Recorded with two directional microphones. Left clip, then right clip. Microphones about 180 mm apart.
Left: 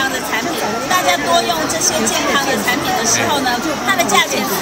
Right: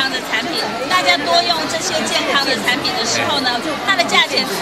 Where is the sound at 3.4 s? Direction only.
5° left (ahead or behind).